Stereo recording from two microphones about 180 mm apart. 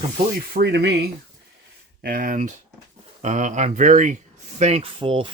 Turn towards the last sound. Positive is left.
turn(degrees=-30)  # may be behind; listen again after turning